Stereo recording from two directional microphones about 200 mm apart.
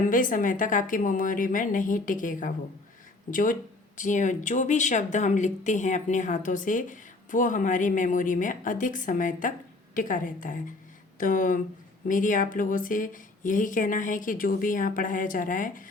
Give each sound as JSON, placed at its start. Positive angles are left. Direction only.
{"t": 0.1, "sound": "a woman's voice", "side_deg": 40}